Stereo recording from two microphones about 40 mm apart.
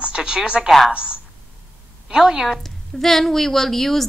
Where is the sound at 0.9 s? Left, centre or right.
Right.